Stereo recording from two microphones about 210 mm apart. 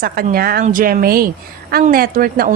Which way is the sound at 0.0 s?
45° right (ahead or behind).